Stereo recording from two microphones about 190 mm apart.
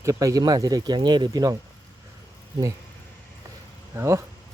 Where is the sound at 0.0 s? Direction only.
15° right (ahead or behind).